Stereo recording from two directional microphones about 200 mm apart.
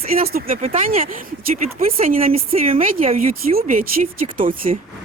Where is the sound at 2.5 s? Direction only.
30° right (ahead or behind).